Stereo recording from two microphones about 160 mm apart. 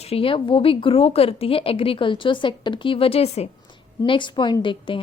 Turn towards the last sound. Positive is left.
turn(degrees=30)  # may be behind; listen again after turning